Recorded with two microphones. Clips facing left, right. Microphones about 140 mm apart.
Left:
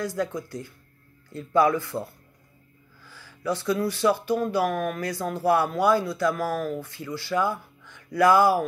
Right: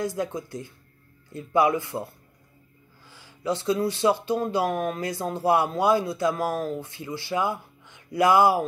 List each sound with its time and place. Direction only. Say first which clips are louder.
0.0 s speech: even; 20° right (ahead or behind)
3.1 s speech: right 1 dB; 20° right (ahead or behind)